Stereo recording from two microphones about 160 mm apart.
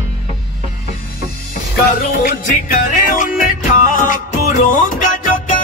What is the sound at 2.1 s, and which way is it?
Music, 55° left (ahead or behind).